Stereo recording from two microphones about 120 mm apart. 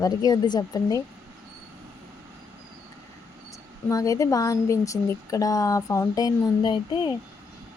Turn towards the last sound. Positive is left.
turn(degrees=40)  # may be behind; listen again after turning